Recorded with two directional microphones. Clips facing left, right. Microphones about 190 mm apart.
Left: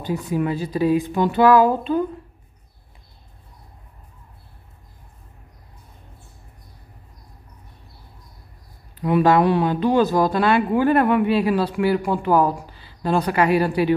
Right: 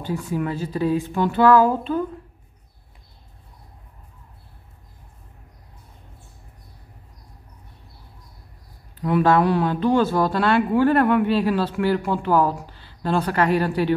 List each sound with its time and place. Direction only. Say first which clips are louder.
0.0 s speech: left 2 dB; 15° left (ahead or behind)
9.0 s speech: left 2 dB; 15° left (ahead or behind)